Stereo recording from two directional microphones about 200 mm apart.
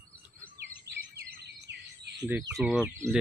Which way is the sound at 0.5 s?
55° right (ahead or behind).